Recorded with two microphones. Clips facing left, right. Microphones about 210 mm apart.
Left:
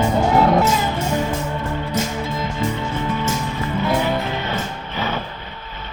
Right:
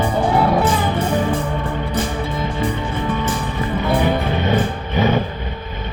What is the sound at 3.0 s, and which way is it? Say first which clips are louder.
Music: right 2 dB; 55° right (ahead or behind).